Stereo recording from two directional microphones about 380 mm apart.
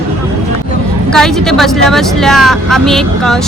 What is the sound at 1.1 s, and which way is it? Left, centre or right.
Speech, centre.